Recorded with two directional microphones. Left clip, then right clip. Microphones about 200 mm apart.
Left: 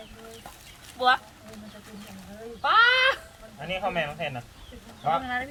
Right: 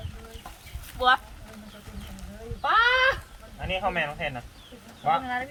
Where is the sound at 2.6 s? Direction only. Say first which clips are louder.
Left 1 dB; 10° right (ahead or behind).